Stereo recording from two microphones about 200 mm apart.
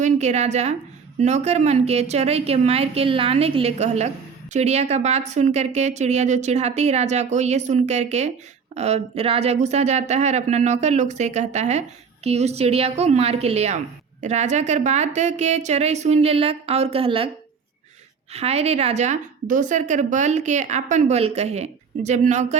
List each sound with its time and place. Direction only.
0.0 s a woman's voice: 35° right (ahead or behind)
18.3 s speech: 30° right (ahead or behind)